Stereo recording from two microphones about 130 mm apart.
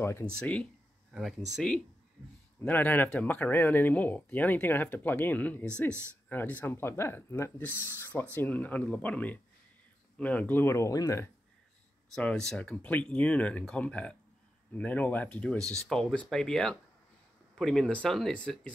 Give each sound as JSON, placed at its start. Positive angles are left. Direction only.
{"t": 0.0, "sound": "speech", "side_deg": 20}
{"t": 0.4, "sound": "speech", "side_deg": 10}
{"t": 2.6, "sound": "speech", "side_deg": 15}
{"t": 12.1, "sound": "speech", "side_deg": 5}